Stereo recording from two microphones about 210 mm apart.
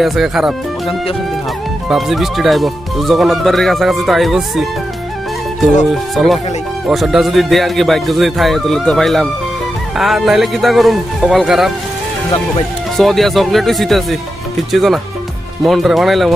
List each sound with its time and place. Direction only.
0.0 s speech: centre (ahead or behind)
5.9 s speech: centre (ahead or behind)
12.9 s speech: centre (ahead or behind)